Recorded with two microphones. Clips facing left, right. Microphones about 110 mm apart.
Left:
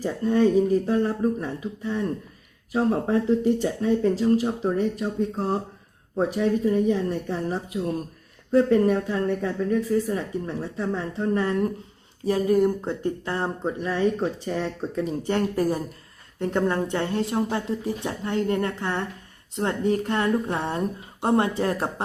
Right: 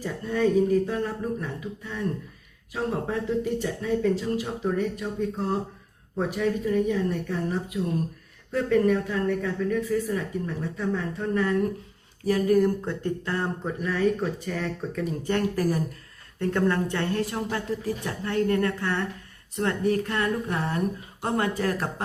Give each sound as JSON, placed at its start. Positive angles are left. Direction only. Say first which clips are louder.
{"t": 0.0, "sound": "speech", "louder": "left 4 dB", "side_deg": 30}